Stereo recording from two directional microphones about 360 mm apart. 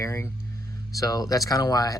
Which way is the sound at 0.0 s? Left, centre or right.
Centre.